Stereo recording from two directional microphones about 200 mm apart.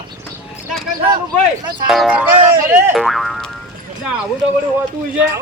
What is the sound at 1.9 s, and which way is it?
Speech, 5° right (ahead or behind).